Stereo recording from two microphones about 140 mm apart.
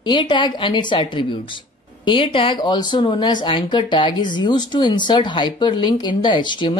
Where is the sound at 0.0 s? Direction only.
35° left (ahead or behind).